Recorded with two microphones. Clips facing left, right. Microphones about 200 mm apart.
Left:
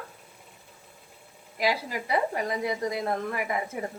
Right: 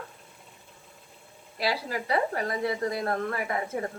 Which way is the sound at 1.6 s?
15° left (ahead or behind).